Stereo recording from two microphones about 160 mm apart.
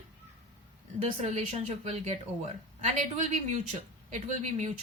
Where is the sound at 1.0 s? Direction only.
40° right (ahead or behind).